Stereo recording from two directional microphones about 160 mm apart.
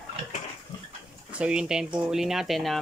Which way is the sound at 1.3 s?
5° right (ahead or behind).